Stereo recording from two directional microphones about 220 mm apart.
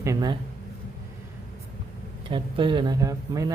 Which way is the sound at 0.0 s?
15° right (ahead or behind).